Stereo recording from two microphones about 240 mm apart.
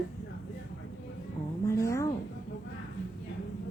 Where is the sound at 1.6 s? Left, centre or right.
Centre.